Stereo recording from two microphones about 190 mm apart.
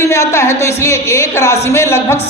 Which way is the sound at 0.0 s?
15° left (ahead or behind).